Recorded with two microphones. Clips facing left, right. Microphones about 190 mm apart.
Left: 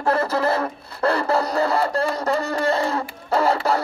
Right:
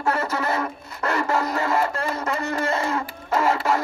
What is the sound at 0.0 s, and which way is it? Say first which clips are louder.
Music: left 4 dB; 35° left (ahead or behind).